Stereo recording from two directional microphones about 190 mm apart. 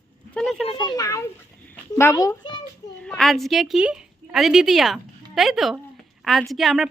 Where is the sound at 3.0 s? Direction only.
5° left (ahead or behind).